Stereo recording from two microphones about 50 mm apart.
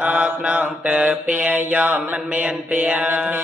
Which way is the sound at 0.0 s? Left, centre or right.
Right.